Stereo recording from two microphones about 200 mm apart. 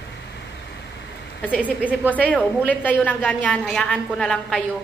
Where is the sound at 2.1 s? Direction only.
5° left (ahead or behind).